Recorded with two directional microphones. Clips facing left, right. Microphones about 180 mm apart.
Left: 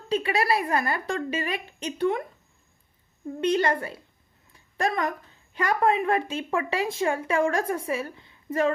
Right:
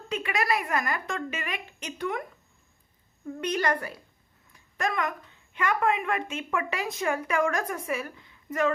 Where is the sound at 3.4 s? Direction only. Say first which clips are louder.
Left 4 dB; 25° left (ahead or behind).